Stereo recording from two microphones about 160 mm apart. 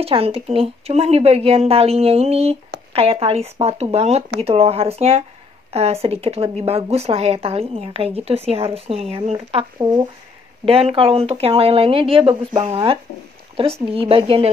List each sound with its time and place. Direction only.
0.0 s speech: 35° right (ahead or behind)
9.8 s speech: 25° right (ahead or behind)
10.6 s speech: 35° right (ahead or behind)